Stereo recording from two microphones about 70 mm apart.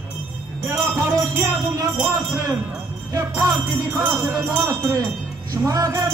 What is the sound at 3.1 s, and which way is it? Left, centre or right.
Jingle bell, right.